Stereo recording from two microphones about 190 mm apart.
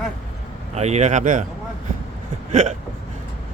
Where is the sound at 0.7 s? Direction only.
35° right (ahead or behind).